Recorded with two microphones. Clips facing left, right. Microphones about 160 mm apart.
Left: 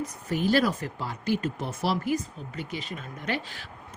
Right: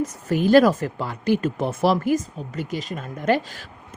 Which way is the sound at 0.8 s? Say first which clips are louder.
Right 6 dB; 55° right (ahead or behind).